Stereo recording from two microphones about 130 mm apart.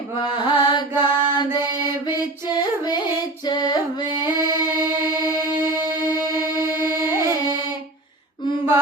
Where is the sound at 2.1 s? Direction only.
30° left (ahead or behind).